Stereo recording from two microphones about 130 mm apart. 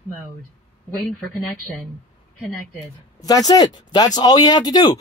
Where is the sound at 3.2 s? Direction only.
30° left (ahead or behind).